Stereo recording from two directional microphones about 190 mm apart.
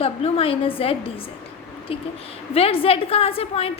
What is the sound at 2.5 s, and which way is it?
A woman's voice, 30° left (ahead or behind).